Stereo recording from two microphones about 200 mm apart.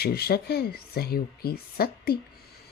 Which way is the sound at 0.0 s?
50° left (ahead or behind).